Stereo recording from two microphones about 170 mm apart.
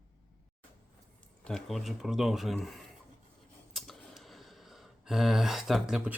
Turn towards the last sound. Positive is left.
turn(degrees=-5)  # may be behind; listen again after turning